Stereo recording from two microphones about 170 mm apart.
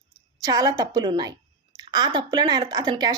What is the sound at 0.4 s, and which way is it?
Speech, 20° right (ahead or behind).